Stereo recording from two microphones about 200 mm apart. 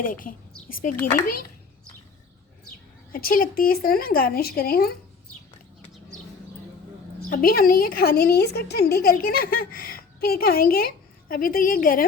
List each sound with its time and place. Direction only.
0.0 s a woman's voice: 45° left (ahead or behind)
3.1 s a woman's voice: 45° left (ahead or behind)
7.3 s a woman's voice: 45° left (ahead or behind)